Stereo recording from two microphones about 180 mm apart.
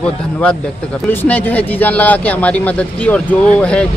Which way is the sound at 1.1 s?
10° left (ahead or behind).